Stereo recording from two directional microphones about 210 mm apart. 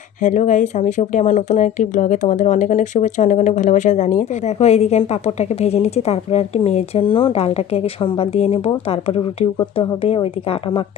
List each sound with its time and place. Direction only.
0.2 s speech: 35° left (ahead or behind)